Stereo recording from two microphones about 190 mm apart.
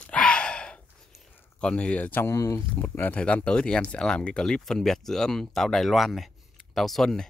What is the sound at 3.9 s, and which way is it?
Speech, 5° left (ahead or behind).